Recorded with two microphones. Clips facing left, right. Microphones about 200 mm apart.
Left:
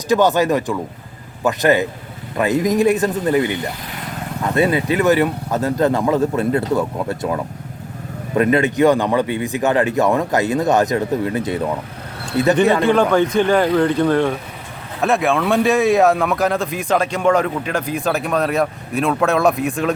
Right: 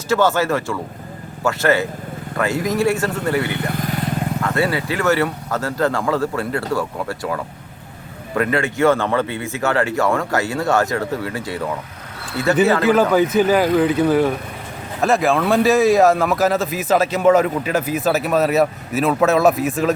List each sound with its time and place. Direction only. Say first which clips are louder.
0.1 s a man's voice: left 2 dB; 15° left (ahead or behind)
3.7 s vehicle: right 6 dB; 50° right (ahead or behind)
4.4 s a man's voice: left 5 dB; 20° left (ahead or behind)
12.8 s speech: even; 5° right (ahead or behind)